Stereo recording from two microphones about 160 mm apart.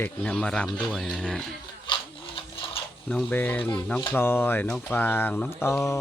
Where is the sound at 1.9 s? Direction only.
35° left (ahead or behind).